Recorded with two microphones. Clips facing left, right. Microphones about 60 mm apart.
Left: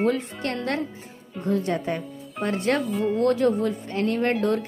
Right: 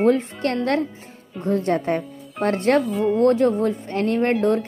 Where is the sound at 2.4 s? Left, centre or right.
Right.